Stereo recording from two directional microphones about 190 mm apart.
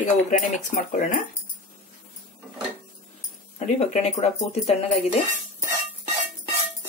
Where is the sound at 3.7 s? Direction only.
35° left (ahead or behind).